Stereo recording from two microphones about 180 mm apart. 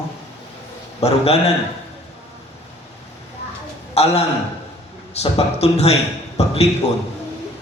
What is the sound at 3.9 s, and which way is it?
A man's voice, 35° left (ahead or behind).